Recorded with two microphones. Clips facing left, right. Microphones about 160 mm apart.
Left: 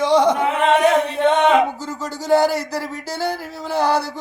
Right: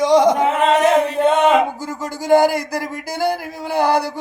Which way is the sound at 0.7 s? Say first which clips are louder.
Left 1 dB; 40° right (ahead or behind).